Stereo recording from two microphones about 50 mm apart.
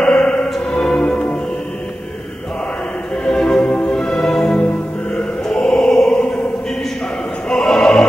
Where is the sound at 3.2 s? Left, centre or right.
Centre.